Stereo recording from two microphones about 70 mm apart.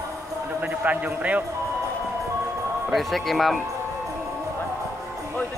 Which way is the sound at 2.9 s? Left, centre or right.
Centre.